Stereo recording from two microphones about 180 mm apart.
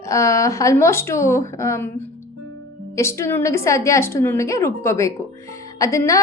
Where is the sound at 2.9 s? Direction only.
15° left (ahead or behind).